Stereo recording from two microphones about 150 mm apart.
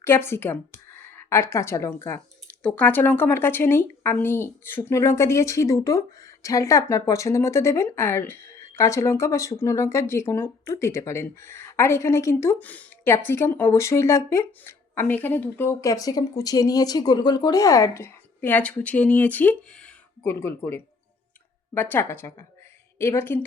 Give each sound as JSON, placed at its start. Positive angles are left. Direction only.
{"t": 0.0, "sound": "speech", "side_deg": 15}